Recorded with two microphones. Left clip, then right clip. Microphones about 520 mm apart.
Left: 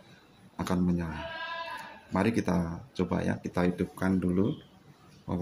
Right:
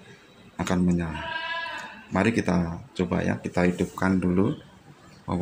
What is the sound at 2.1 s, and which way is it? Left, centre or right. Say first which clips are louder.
Speech: right 5 dB; left.